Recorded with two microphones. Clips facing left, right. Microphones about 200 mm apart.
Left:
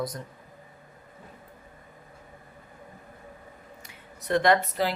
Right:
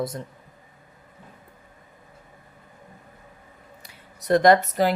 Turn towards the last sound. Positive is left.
turn(degrees=-40)  # may be behind; listen again after turning